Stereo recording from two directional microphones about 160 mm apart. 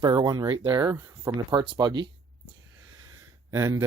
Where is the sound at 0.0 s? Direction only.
25° right (ahead or behind).